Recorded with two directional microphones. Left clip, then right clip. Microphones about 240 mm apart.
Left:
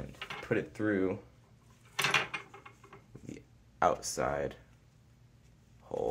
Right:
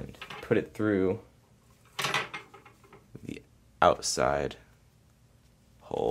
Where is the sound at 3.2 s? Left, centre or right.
Right.